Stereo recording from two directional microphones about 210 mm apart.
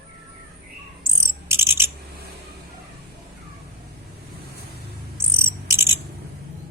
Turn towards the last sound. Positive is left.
turn(degrees=-10)  # may be behind; listen again after turning